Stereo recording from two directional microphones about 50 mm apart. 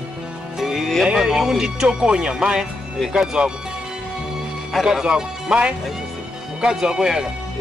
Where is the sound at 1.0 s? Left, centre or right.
Centre.